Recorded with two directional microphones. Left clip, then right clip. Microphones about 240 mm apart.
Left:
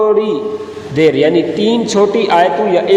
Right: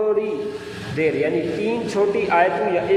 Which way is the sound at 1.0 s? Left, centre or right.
Left.